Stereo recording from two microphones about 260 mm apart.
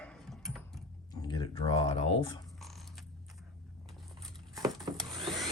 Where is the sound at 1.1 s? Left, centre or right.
Centre.